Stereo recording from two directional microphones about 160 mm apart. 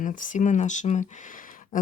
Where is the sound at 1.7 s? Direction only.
55° left (ahead or behind).